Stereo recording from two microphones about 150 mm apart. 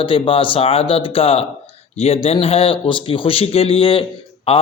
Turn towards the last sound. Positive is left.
turn(degrees=40)  # may be behind; listen again after turning